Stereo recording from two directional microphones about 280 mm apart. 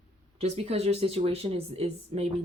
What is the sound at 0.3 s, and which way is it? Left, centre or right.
Speech, right.